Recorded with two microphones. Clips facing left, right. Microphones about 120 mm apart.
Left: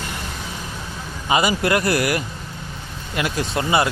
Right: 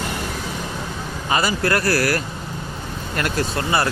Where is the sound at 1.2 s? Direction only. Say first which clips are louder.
Left 2 dB; 15° left (ahead or behind).